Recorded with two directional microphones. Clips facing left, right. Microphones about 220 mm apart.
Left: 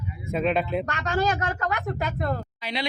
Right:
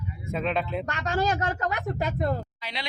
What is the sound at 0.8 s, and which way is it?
Speech, 25° right (ahead or behind).